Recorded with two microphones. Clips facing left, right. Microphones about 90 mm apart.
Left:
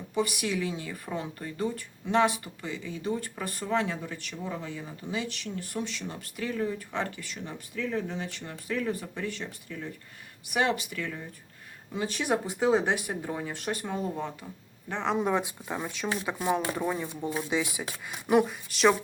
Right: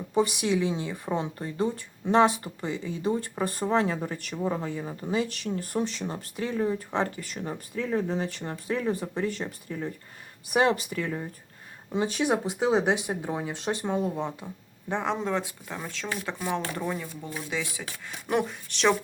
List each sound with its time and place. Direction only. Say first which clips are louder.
0.1 s speech: right 5 dB; 30° right (ahead or behind)
11.9 s speech: right 3 dB; 20° right (ahead or behind)
15.2 s speech: left 2 dB; 15° left (ahead or behind)
18.3 s speech: left 4 dB; 5° left (ahead or behind)